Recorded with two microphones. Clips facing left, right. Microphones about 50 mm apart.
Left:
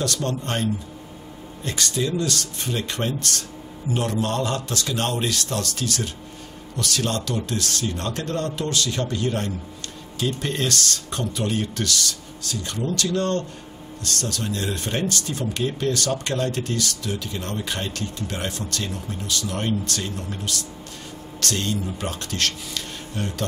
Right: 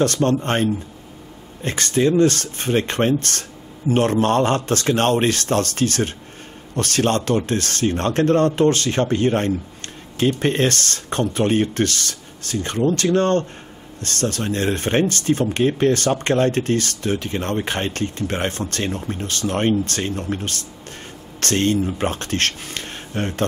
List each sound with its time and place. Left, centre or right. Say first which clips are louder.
0.0 s speech: right 8 dB; right